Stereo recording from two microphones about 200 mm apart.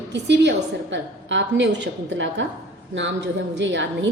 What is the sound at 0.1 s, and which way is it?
A woman's voice, 60° right (ahead or behind).